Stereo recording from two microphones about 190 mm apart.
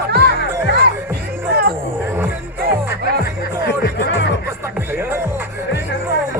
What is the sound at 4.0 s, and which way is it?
Speech, 65° left (ahead or behind).